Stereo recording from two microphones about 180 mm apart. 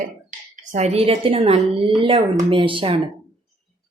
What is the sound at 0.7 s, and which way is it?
Speech, 35° right (ahead or behind).